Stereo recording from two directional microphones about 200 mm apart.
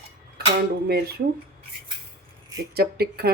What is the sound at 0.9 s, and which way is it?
Speech, 55° right (ahead or behind).